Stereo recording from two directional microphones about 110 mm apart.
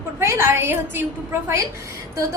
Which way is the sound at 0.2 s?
25° right (ahead or behind).